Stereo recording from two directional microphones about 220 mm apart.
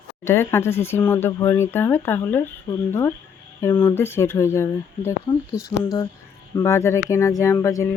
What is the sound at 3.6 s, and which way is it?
A woman's voice, 10° left (ahead or behind).